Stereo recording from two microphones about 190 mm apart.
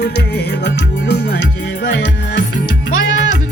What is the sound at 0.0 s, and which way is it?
Music, 65° left (ahead or behind).